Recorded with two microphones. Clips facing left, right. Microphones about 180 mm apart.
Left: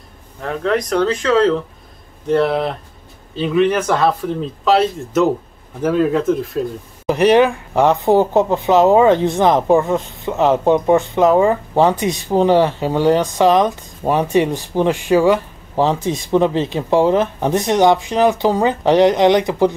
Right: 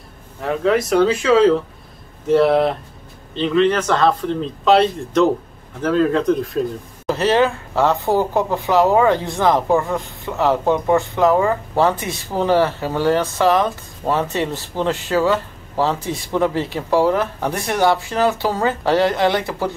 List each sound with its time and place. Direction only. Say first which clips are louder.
0.4 s speech: right 1 dB; 5° right (ahead or behind)
7.1 s speech: left 4 dB; 15° left (ahead or behind)